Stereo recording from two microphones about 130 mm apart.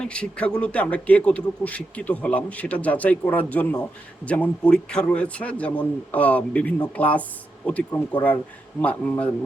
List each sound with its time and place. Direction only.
0.0 s speech: 10° left (ahead or behind)